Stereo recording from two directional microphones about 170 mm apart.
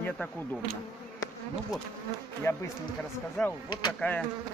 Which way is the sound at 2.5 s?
15° left (ahead or behind).